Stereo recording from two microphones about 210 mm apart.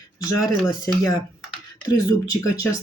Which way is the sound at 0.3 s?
15° left (ahead or behind).